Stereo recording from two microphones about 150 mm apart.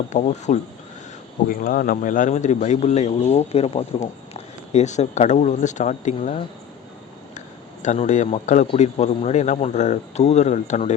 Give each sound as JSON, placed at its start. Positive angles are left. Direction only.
{"t": 0.1, "sound": "speech", "side_deg": 50}
{"t": 1.5, "sound": "speech", "side_deg": 70}